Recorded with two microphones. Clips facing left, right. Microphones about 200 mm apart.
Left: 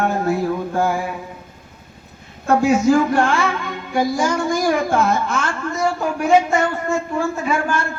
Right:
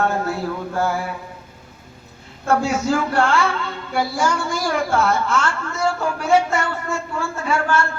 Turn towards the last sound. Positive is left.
turn(degrees=15)  # may be behind; listen again after turning